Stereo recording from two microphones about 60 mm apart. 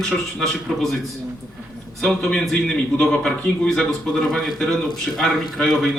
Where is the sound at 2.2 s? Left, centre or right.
Centre.